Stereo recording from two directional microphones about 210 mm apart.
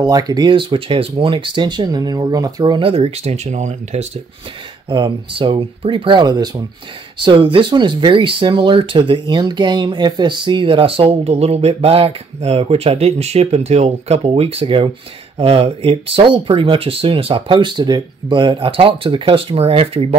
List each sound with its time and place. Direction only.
0.0 s speech: 20° right (ahead or behind)